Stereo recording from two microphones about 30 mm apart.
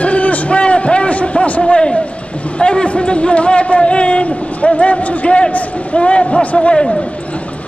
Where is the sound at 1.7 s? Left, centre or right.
Left.